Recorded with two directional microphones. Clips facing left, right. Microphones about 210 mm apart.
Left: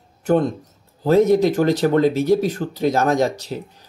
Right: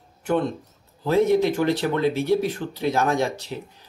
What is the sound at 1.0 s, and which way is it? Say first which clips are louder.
Speech: left 4 dB; 40° left (ahead or behind).